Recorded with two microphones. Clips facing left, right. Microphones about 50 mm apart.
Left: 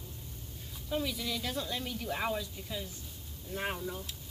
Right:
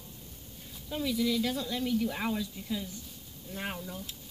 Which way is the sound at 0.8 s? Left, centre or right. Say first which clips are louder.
Right 4 dB; centre.